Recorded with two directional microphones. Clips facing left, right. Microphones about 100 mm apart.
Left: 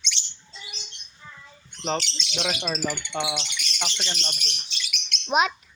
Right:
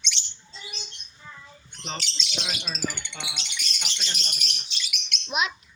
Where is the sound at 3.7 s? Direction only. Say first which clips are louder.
Left 8 dB; 90° left.